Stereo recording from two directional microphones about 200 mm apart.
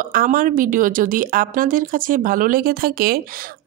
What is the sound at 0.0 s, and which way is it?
Speech, 45° right (ahead or behind).